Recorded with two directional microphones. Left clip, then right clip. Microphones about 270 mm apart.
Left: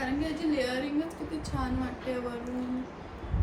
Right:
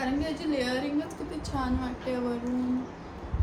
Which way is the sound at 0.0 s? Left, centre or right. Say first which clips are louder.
Right 1 dB; centre.